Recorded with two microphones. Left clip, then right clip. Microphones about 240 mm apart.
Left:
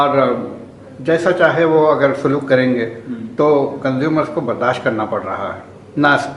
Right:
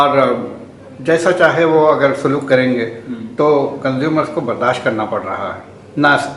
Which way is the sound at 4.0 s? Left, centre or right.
Centre.